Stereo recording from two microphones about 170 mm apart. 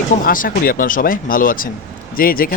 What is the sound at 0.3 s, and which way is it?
Speech, 55° left (ahead or behind).